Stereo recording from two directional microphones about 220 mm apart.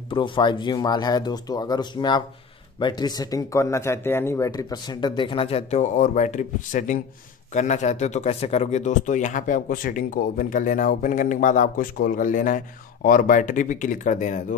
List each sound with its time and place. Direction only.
0.1 s a man's voice: 20° left (ahead or behind)